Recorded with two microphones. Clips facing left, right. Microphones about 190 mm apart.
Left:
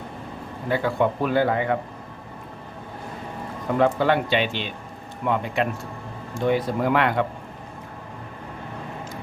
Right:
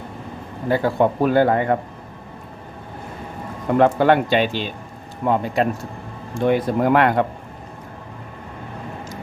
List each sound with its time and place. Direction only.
0.7 s speech: 40° right (ahead or behind)
3.8 s speech: 50° right (ahead or behind)
6.3 s speech: 50° right (ahead or behind)